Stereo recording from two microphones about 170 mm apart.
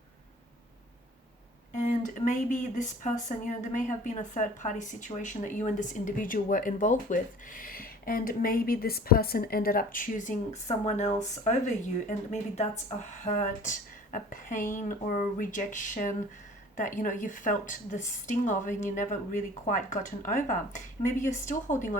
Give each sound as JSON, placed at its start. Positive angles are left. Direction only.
{"t": 1.7, "sound": "speech", "side_deg": 45}
{"t": 13.0, "sound": "speech", "side_deg": 45}